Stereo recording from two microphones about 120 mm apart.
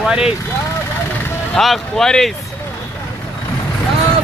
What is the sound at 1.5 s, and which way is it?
Speech, centre (ahead or behind).